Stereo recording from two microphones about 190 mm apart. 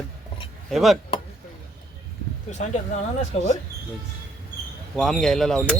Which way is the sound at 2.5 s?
40° left (ahead or behind).